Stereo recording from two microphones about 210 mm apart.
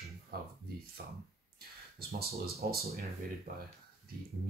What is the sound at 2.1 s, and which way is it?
Speech, 45° right (ahead or behind).